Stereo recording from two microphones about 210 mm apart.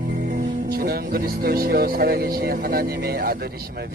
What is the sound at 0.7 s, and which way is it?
Music, 45° right (ahead or behind).